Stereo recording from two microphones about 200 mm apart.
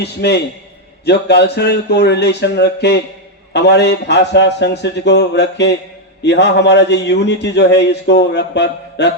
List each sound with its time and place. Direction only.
0.0 s a man's voice: 55° left (ahead or behind)